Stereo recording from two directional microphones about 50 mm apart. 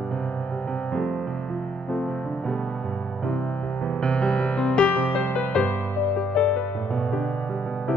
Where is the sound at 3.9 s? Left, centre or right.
Centre.